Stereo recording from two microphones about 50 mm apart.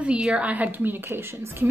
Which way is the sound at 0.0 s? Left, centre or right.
Right.